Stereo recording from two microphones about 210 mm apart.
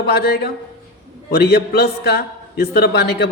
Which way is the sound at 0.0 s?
50° left (ahead or behind).